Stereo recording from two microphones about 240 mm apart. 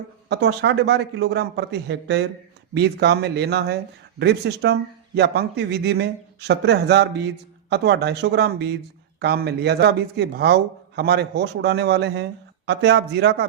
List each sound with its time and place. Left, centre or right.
0.3 s speech: right